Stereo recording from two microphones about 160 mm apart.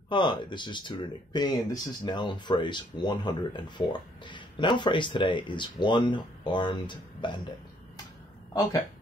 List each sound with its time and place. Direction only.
0.1 s speech: 30° left (ahead or behind)